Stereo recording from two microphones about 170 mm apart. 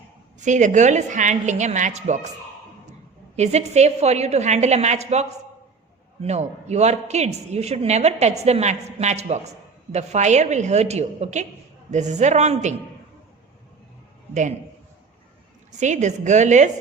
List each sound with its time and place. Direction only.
0.3 s a woman's voice: 45° right (ahead or behind)
3.3 s speech: 40° right (ahead or behind)
6.2 s a woman's voice: 40° right (ahead or behind)
15.8 s a woman's voice: 45° right (ahead or behind)